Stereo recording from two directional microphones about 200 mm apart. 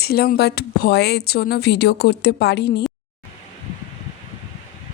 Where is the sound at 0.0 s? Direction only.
50° left (ahead or behind).